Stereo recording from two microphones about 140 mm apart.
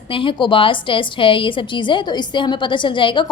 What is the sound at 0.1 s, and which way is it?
A woman's voice, 40° left (ahead or behind).